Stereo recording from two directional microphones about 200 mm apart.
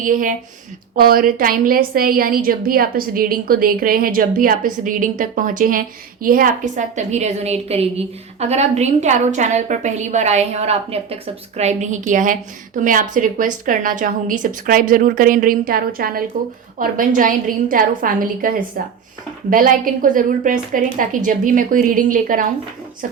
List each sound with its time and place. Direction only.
0.0 s a woman's voice: 40° right (ahead or behind)